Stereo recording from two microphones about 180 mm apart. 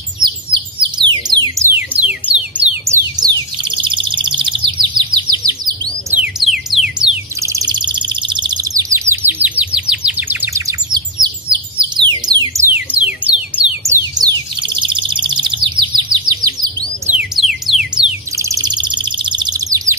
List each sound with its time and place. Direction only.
0.2 s bird: 25° right (ahead or behind)
1.7 s music: 10° right (ahead or behind)
3.2 s bird: 25° right (ahead or behind)
6.1 s music: 5° right (ahead or behind)
7.4 s bird: 20° right (ahead or behind)
12.3 s music: 20° right (ahead or behind)
12.7 s music: 10° right (ahead or behind)
17.1 s music: 5° right (ahead or behind)
18.4 s bird: 20° right (ahead or behind)